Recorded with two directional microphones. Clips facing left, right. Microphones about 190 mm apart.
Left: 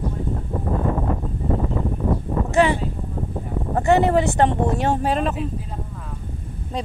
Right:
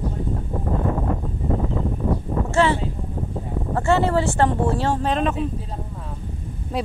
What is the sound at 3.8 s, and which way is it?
Speech, 20° left (ahead or behind).